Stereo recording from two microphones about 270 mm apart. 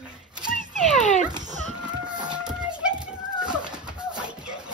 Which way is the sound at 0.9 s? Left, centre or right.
Left.